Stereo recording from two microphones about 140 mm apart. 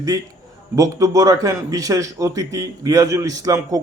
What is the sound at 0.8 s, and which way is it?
A man's voice, 25° right (ahead or behind).